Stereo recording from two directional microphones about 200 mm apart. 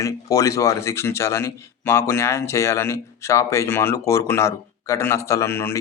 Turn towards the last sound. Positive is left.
turn(degrees=10)  # may be behind; listen again after turning